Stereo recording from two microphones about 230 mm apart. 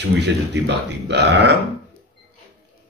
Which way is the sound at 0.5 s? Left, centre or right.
Right.